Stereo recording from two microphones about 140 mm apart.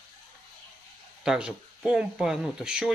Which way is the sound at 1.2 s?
5° right (ahead or behind).